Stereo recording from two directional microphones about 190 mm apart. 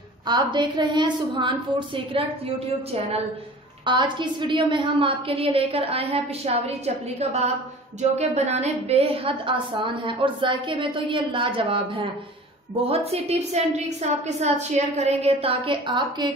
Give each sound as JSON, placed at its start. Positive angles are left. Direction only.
{"t": 0.3, "sound": "a woman's voice", "side_deg": -25}
{"t": 3.8, "sound": "a woman's voice", "side_deg": -25}